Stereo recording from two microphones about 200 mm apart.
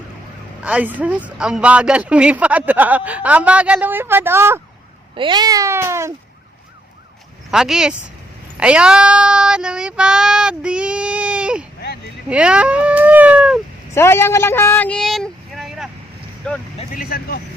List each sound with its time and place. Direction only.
0.6 s speech: 5° right (ahead or behind)
5.1 s speech: 25° right (ahead or behind)
7.5 s speech: 5° right (ahead or behind)
8.5 s child singing: 5° right (ahead or behind)
12.3 s a sound: 5° right (ahead or behind)
13.9 s speech: 10° left (ahead or behind)
16.7 s speech: 45° left (ahead or behind)